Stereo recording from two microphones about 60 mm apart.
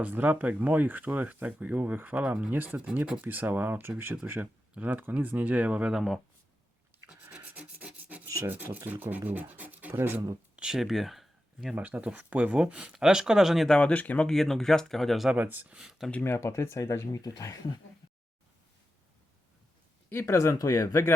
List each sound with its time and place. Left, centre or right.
0.0 s speech: right
6.9 s a sound: right
7.4 s rub: right
8.4 s speech: right
10.5 s a sound: centre
10.8 s speech: centre
11.7 s speech: right; by 13.7 s centre
13.7 s speech: centre
14.3 s speech: centre
15.4 s speech: right
15.6 s speech: centre
16.2 s speech: left
20.1 s speech: left
20.6 s speech: left